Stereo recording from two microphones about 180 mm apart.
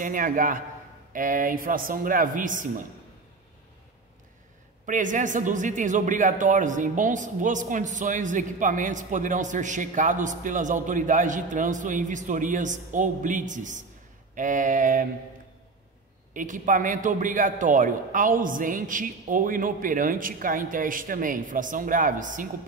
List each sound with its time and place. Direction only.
0.0 s a man's voice: 45° right (ahead or behind)
4.8 s a man's voice: 45° right (ahead or behind)
16.3 s a man's voice: 45° right (ahead or behind)